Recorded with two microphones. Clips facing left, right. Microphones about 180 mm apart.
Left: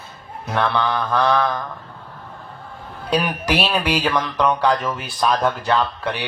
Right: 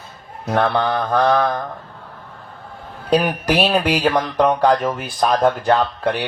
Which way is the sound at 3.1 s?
45° right (ahead or behind).